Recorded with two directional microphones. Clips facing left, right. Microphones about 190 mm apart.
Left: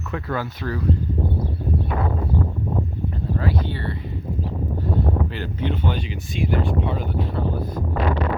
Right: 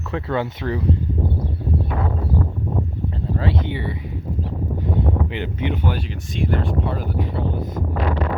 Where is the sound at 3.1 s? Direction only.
25° right (ahead or behind).